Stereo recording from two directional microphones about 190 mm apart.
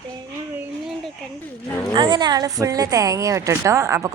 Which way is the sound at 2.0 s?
25° right (ahead or behind).